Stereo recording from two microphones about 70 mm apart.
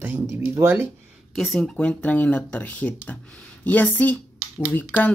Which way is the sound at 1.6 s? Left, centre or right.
Centre.